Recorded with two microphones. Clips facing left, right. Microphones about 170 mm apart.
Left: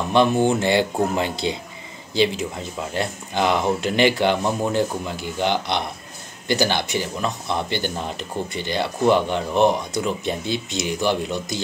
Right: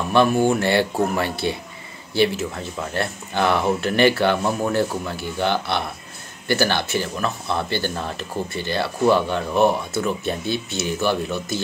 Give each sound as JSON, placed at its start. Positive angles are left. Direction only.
{"t": 0.1, "sound": "speech", "side_deg": 20}